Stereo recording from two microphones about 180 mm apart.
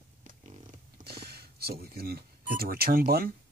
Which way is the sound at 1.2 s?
60° right (ahead or behind).